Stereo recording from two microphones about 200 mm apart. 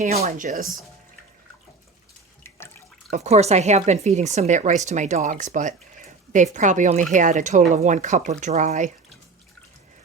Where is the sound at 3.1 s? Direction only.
35° right (ahead or behind).